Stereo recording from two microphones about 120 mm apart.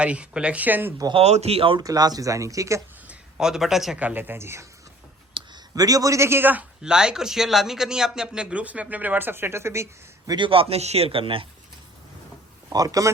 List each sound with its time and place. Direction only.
0.0 s a man's voice: 10° right (ahead or behind)
1.1 s speech: 60° right (ahead or behind)
1.8 s speech: 30° right (ahead or behind)
3.1 s a man's voice: 5° right (ahead or behind)
3.9 s a man's voice: 15° right (ahead or behind)
5.4 s a sound: 45° right (ahead or behind)
5.7 s a man's voice: 30° right (ahead or behind)
10.3 s a man's voice: 45° right (ahead or behind)
12.7 s speech: 30° right (ahead or behind)